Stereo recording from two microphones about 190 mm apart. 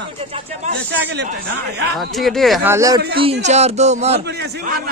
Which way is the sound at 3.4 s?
35° right (ahead or behind).